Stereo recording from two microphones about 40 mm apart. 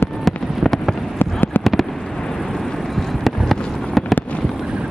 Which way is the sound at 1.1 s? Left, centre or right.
Left.